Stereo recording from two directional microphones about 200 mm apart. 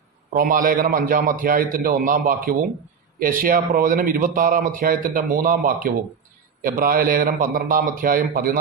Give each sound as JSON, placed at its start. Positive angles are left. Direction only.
{"t": 0.3, "sound": "speech", "side_deg": -45}